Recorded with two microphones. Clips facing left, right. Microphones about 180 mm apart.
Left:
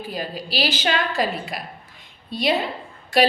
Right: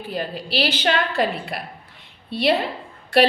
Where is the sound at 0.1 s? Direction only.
60° right (ahead or behind).